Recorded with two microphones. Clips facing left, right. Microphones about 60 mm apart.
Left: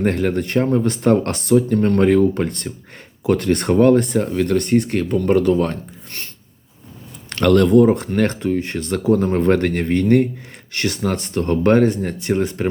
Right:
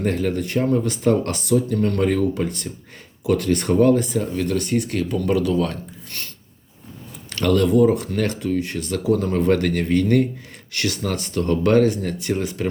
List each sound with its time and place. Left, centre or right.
0.3 s speech: left
7.3 s speech: left